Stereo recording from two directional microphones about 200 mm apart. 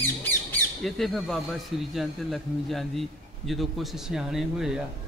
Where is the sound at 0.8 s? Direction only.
Centre (ahead or behind).